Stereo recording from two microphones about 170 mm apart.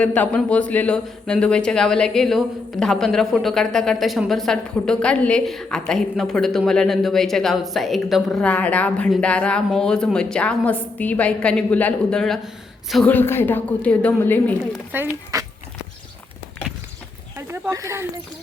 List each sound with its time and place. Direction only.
0.0 s a woman's voice: 10° left (ahead or behind)
14.9 s speech: 15° right (ahead or behind)
17.3 s a sound: 15° right (ahead or behind)